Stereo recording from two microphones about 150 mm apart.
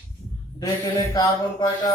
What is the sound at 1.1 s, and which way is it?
Music, 25° left (ahead or behind).